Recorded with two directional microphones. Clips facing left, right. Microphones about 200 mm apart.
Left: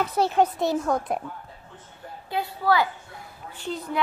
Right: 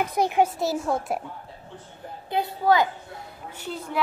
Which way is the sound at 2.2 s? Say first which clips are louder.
Right 2 dB; 20° right (ahead or behind).